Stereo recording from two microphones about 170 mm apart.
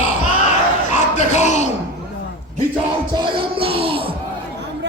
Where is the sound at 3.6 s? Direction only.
35° right (ahead or behind).